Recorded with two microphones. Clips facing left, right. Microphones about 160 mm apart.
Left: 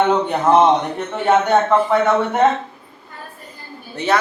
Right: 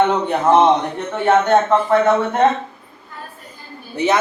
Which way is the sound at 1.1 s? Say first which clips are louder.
Right 1 dB; 5° left (ahead or behind).